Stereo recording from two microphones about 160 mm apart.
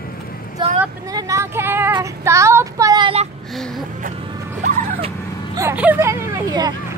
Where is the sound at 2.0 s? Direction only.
20° right (ahead or behind).